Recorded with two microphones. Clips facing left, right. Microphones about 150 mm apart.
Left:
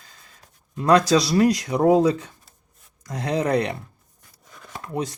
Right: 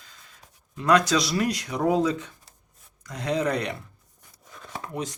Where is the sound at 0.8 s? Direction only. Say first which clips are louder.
Left 4 dB; 35° left (ahead or behind).